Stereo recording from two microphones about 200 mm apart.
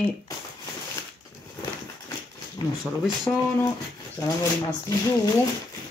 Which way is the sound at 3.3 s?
15° left (ahead or behind).